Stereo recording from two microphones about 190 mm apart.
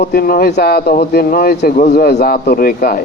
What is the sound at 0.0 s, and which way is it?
A man's voice, 50° left (ahead or behind).